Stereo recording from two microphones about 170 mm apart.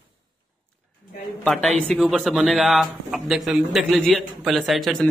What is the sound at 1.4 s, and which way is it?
A man's voice, centre (ahead or behind).